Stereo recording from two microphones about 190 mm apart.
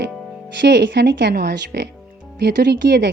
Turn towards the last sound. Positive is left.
turn(degrees=-60)  # may be behind; listen again after turning